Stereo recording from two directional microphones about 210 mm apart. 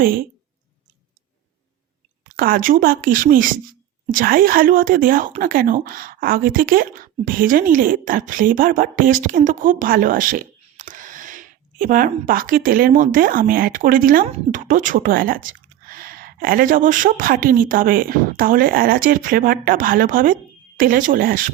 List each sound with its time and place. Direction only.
2.3 s a woman's voice: 45° right (ahead or behind)